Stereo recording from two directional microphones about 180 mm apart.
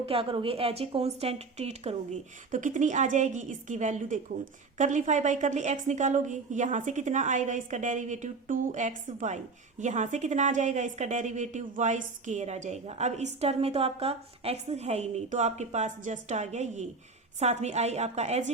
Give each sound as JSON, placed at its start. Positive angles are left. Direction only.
{"t": 0.0, "sound": "a woman's voice", "side_deg": -30}